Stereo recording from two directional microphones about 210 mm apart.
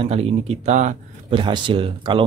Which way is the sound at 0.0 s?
30° right (ahead or behind).